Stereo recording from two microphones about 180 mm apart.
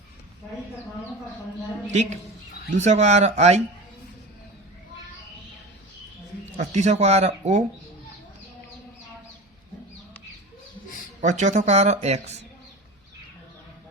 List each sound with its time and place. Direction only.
1.9 s speech: 40° right (ahead or behind)
6.6 s speech: 40° right (ahead or behind)
11.2 s speech: 40° right (ahead or behind)